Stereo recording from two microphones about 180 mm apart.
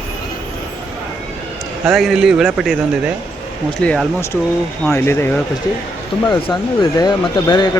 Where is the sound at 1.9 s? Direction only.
Centre (ahead or behind).